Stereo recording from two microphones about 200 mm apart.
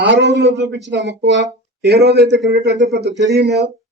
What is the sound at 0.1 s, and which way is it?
Speech, 55° right (ahead or behind).